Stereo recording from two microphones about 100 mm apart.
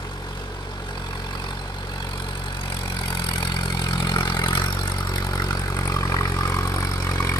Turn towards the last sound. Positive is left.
turn(degrees=35)  # may be behind; listen again after turning